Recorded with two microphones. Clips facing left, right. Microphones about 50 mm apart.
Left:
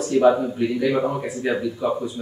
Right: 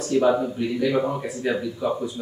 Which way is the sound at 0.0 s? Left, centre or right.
Centre.